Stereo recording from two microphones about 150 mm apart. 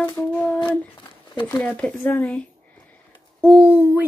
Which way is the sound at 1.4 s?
10° left (ahead or behind).